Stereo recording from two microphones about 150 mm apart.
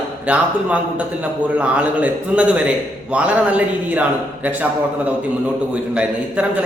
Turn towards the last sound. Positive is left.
turn(degrees=-10)  # may be behind; listen again after turning